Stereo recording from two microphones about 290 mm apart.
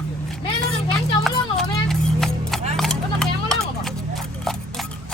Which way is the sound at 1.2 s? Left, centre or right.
Centre.